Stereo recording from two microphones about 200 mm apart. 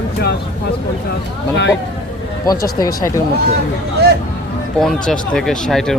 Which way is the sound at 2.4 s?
15° left (ahead or behind).